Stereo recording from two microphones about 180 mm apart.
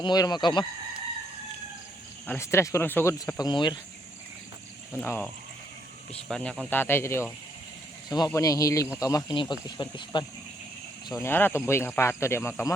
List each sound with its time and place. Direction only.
0.0 s speech: 20° left (ahead or behind)
2.2 s speech: 10° left (ahead or behind)
4.9 s speech: 10° left (ahead or behind); by 10.2 s 25° left (ahead or behind)
11.1 s speech: 15° left (ahead or behind)